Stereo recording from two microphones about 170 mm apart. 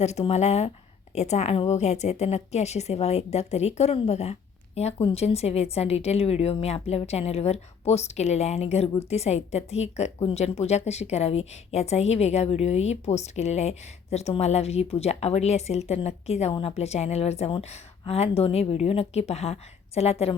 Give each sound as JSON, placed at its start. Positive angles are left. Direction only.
{"t": 0.0, "sound": "a woman's voice", "side_deg": 40}